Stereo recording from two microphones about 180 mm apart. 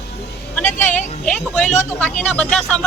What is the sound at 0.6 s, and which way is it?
Speech, 40° left (ahead or behind).